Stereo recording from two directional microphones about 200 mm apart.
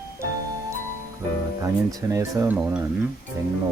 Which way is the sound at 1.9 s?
15° right (ahead or behind).